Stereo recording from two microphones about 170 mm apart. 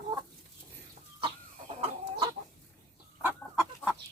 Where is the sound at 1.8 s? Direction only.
35° right (ahead or behind).